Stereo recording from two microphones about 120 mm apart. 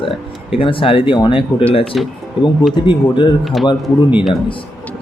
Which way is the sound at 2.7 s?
40° left (ahead or behind).